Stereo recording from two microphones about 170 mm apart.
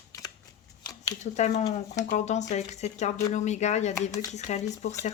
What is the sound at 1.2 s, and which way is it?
Speech, 45° left (ahead or behind).